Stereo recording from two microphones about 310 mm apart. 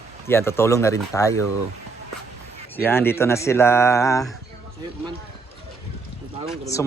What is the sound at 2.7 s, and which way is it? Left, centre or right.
Speech, centre.